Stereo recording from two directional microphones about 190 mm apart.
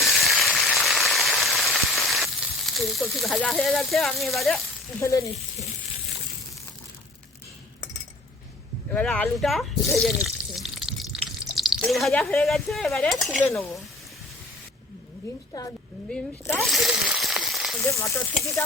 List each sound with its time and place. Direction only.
0.0 s a sound: centre (ahead or behind)
4.9 s sizzle: 15° left (ahead or behind)
8.9 s speech: 5° left (ahead or behind)
10.0 s drip: centre (ahead or behind)
12.2 s sizzle: 10° left (ahead or behind)
12.5 s speech: centre (ahead or behind)
16.0 s a sound: 5° left (ahead or behind)
17.9 s sizzle: 15° left (ahead or behind)